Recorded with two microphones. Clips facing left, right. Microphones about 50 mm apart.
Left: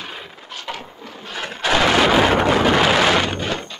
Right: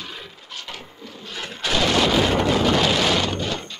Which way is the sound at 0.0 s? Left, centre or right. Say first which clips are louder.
Left 3 dB; left.